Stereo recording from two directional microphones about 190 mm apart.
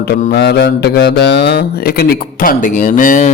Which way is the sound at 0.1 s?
55° left (ahead or behind).